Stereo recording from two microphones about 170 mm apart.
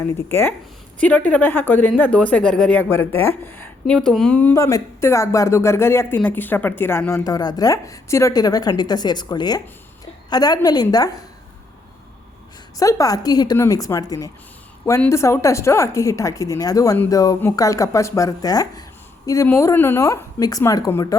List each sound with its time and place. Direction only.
0.0 s a woman's voice: 15° left (ahead or behind)
12.8 s a woman's voice: 20° left (ahead or behind)